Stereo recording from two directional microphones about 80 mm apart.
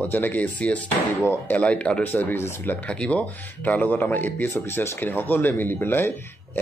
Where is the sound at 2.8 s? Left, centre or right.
Centre.